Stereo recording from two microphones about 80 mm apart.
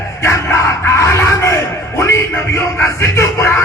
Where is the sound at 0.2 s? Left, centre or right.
Left.